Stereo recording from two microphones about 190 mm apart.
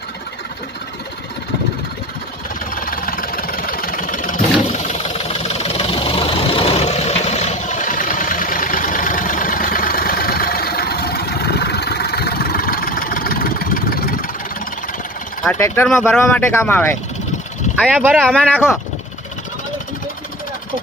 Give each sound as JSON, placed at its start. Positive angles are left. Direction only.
{"t": 2.8, "sound": "vehicle", "side_deg": 50}
{"t": 4.7, "sound": "engine", "side_deg": 40}
{"t": 15.4, "sound": "speech", "side_deg": 10}
{"t": 17.7, "sound": "speech", "side_deg": 0}